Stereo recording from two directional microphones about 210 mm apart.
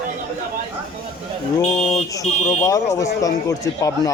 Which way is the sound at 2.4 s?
15° left (ahead or behind).